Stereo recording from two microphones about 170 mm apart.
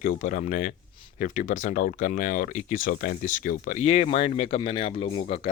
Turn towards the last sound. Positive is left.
turn(degrees=30)  # may be behind; listen again after turning